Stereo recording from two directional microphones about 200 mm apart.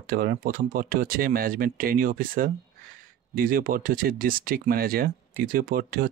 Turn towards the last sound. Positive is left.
turn(degrees=-45)  # may be behind; listen again after turning